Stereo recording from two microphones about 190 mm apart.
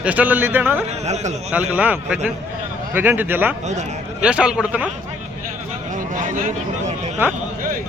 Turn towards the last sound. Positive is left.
turn(degrees=-40)  # may be behind; listen again after turning